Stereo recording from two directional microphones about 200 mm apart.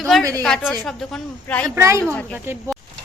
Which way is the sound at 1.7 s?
15° right (ahead or behind).